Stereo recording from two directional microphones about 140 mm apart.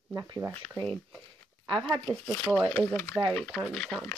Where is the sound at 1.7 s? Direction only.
5° left (ahead or behind).